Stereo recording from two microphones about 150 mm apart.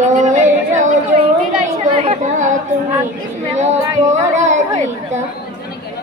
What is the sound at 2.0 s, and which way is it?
Speech, 55° right (ahead or behind).